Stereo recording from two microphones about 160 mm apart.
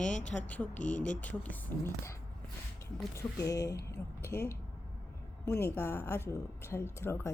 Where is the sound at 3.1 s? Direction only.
20° left (ahead or behind).